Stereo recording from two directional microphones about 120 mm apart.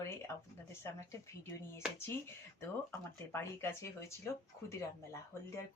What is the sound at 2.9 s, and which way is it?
Speech, 20° left (ahead or behind).